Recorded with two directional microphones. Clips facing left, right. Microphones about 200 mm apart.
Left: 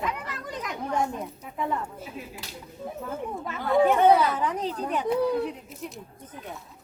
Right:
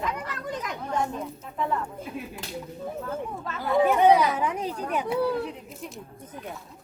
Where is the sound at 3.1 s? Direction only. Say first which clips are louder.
Even; 15° left (ahead or behind).